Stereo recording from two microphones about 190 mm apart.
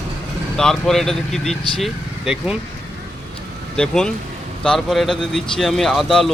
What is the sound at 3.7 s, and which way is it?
Speech, 5° left (ahead or behind).